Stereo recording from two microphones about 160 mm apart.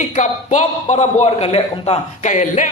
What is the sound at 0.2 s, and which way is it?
A man's voice, 50° left (ahead or behind).